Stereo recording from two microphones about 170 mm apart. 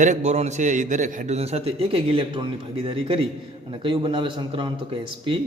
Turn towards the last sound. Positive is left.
turn(degrees=-30)  # may be behind; listen again after turning